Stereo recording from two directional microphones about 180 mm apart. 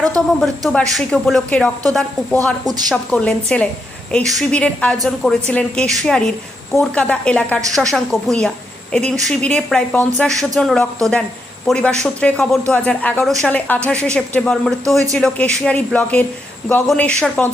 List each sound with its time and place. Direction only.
0.3 s a woman's voice: centre (ahead or behind)